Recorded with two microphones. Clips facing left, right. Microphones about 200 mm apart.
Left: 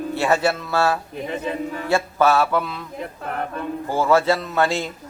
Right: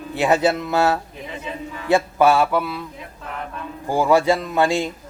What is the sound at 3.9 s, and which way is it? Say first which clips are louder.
Speech: right 2 dB; 15° right (ahead or behind).